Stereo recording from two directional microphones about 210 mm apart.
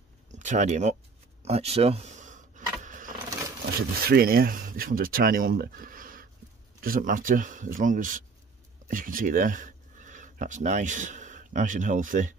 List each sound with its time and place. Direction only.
0.3 s speech: 35° right (ahead or behind)
1.4 s a sound: 30° right (ahead or behind)
4.0 s speech: 45° right (ahead or behind)